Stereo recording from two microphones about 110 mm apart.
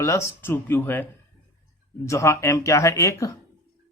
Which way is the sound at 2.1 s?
25° left (ahead or behind).